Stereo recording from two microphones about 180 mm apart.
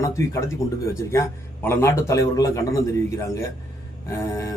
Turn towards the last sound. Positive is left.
turn(degrees=15)  # may be behind; listen again after turning